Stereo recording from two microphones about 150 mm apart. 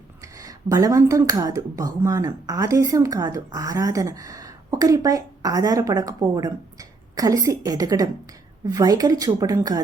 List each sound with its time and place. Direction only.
0.2 s speech: 25° right (ahead or behind)